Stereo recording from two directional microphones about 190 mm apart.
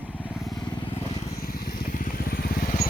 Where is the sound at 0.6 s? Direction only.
25° left (ahead or behind).